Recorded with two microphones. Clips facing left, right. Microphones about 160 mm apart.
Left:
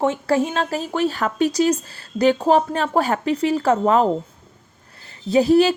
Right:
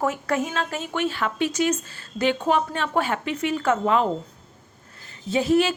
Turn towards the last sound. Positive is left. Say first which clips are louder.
# left 5 dB
turn(degrees=35)  # may be behind; listen again after turning